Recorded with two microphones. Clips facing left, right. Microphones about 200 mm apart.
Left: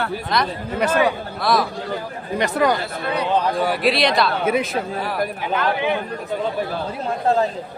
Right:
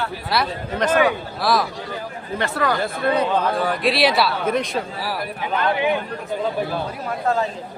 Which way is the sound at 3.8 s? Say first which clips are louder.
Right 1 dB; 5° right (ahead or behind).